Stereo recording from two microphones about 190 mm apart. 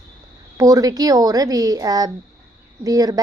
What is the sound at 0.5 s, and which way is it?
A woman's voice, 20° right (ahead or behind).